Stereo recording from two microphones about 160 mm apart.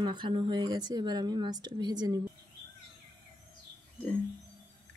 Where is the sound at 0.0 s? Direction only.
30° right (ahead or behind).